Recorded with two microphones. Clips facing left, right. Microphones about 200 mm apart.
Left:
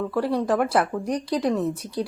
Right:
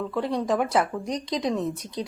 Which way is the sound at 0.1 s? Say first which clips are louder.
Left 2 dB; 5° left (ahead or behind).